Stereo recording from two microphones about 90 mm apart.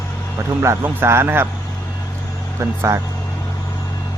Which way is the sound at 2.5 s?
30° right (ahead or behind).